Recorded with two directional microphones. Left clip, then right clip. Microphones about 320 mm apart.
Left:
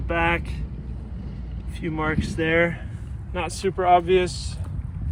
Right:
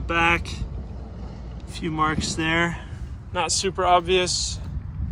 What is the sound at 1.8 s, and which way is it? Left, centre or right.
Speech, centre.